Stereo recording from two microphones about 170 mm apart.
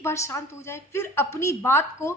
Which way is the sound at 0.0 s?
15° left (ahead or behind).